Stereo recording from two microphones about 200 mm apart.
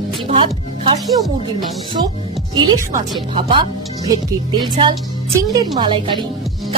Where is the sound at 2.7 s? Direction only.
20° right (ahead or behind).